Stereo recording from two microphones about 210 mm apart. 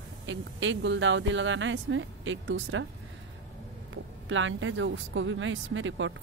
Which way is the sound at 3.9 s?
65° right (ahead or behind).